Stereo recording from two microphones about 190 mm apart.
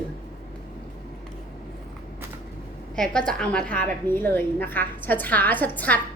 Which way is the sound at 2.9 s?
5° left (ahead or behind).